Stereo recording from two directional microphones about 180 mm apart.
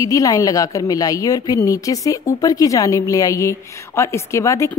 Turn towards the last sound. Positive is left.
turn(degrees=15)  # may be behind; listen again after turning